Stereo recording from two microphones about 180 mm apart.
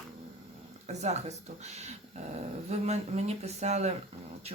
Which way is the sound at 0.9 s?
40° right (ahead or behind).